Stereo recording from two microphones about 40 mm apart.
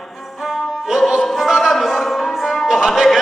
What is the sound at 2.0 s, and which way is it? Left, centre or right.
Music, centre.